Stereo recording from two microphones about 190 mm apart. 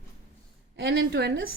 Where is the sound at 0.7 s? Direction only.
60° right (ahead or behind).